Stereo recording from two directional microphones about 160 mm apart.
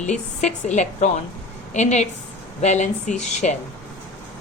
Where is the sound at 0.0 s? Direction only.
45° left (ahead or behind).